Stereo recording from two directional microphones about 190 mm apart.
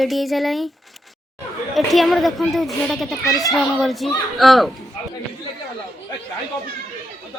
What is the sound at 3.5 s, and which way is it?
Speech, centre (ahead or behind).